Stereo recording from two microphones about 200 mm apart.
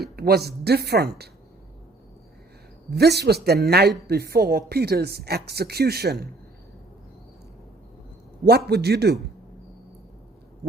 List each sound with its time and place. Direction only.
0.2 s speech: 50° right (ahead or behind)
2.9 s speech: 55° right (ahead or behind)
8.4 s speech: 50° right (ahead or behind)